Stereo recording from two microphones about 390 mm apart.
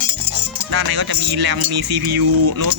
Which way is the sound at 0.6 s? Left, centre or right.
Right.